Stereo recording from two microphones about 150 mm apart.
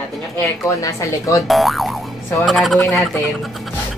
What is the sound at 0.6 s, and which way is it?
Speech, 20° left (ahead or behind).